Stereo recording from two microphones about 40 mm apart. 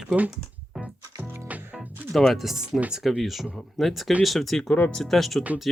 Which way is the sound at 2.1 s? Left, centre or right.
Centre.